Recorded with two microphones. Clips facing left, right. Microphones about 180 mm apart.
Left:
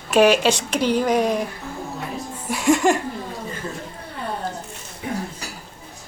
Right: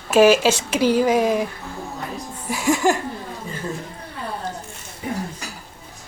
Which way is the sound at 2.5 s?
Centre (ahead or behind).